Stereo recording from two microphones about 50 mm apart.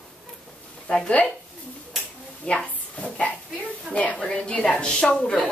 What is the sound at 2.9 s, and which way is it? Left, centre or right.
Dog, left.